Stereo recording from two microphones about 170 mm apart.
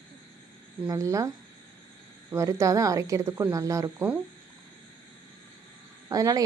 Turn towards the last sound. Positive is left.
turn(degrees=-20)  # may be behind; listen again after turning